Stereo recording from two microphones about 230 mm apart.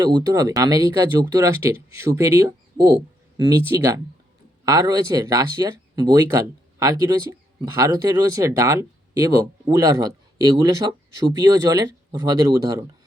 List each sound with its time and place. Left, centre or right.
0.0 s speech: centre